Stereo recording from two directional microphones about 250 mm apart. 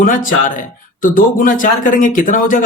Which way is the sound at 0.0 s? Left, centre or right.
Left.